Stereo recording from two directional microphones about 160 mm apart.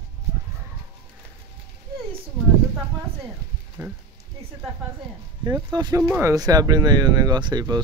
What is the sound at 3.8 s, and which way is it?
Speech, 15° right (ahead or behind).